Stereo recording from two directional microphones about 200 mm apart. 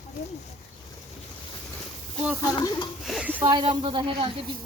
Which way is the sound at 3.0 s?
5° right (ahead or behind).